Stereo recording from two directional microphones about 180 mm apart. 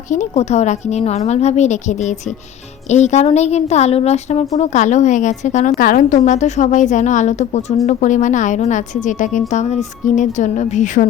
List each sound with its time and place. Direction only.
0.1 s a woman's voice: 40° left (ahead or behind)